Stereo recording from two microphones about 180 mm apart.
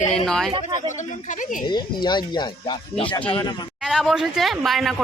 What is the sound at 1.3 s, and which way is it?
Speech, 45° left (ahead or behind).